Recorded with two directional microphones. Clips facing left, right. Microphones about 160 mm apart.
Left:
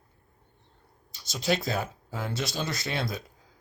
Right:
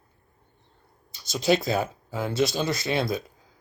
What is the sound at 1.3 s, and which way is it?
Speech, 20° right (ahead or behind).